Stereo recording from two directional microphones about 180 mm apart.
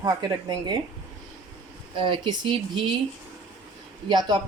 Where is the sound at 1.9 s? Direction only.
30° right (ahead or behind).